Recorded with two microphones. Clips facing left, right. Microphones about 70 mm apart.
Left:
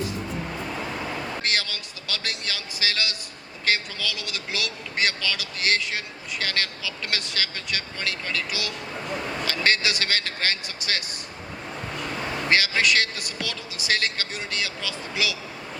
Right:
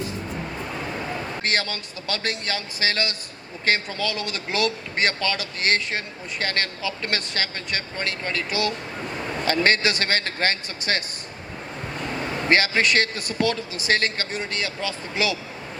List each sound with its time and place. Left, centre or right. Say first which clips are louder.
1.4 s speech: right 3 dB; right
12.5 s speech: right 2 dB; right